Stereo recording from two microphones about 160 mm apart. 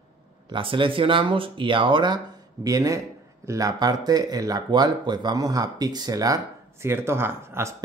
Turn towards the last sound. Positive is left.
turn(degrees=-15)  # may be behind; listen again after turning